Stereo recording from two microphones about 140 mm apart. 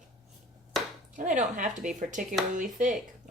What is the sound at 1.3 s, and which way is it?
Speech, 65° right (ahead or behind).